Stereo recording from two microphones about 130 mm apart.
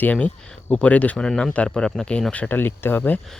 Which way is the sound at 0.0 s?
10° left (ahead or behind).